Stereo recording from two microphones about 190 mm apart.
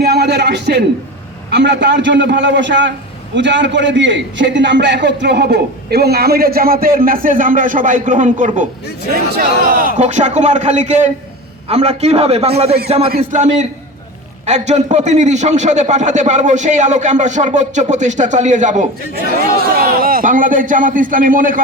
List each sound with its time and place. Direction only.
0.0 s a man's voice: 60° right (ahead or behind); by 8.6 s 40° right (ahead or behind)
9.3 s a man's voice: 55° right (ahead or behind)
19.5 s a man's voice: 50° right (ahead or behind)